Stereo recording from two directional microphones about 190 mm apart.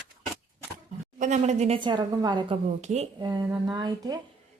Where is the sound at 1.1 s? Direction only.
40° right (ahead or behind); by 2.6 s 25° right (ahead or behind).